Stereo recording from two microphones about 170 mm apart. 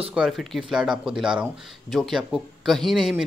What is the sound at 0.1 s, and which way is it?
Speech, centre (ahead or behind).